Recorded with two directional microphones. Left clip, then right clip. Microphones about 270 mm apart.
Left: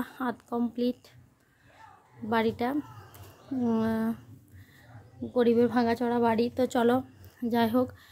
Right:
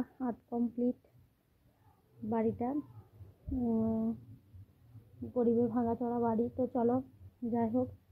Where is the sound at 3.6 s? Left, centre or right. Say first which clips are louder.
Left 6 dB; left.